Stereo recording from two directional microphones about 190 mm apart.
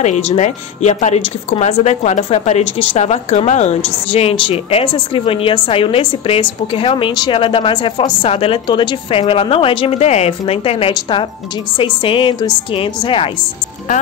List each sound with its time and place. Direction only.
0.0 s a woman's voice: 40° left (ahead or behind)